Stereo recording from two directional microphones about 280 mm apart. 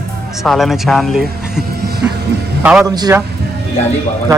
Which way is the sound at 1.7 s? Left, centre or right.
Right.